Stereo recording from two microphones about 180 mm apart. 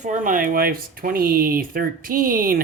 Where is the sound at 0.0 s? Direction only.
45° right (ahead or behind).